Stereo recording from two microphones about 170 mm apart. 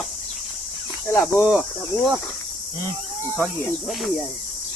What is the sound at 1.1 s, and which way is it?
Speech, 15° left (ahead or behind).